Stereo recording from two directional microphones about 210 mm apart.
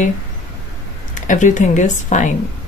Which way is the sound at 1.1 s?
35° left (ahead or behind).